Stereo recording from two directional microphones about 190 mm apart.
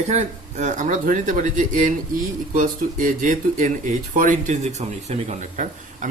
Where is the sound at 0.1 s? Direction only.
35° right (ahead or behind).